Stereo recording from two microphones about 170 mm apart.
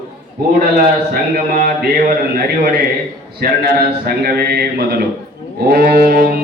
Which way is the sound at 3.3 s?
65° right (ahead or behind).